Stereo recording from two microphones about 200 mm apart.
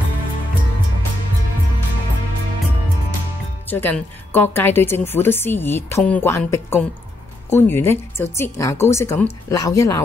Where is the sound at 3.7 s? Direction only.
10° left (ahead or behind).